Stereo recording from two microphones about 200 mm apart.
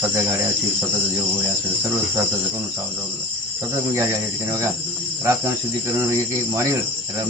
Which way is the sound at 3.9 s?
15° right (ahead or behind).